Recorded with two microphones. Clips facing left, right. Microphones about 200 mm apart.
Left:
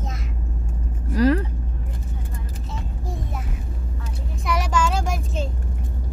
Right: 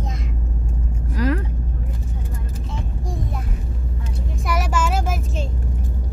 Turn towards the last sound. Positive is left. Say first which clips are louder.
# right 1 dB
turn(degrees=-5)  # may be behind; listen again after turning